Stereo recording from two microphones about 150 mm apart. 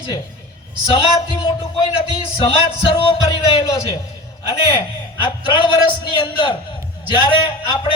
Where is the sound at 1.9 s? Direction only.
35° left (ahead or behind).